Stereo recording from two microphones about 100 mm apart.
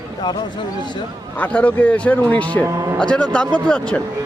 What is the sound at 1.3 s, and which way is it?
A man's voice, 15° left (ahead or behind).